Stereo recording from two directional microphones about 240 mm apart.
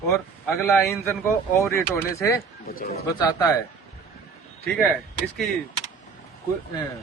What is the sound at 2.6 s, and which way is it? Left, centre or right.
Speech, left.